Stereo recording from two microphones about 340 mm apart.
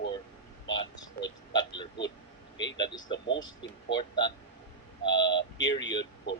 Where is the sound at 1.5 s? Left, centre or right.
Centre.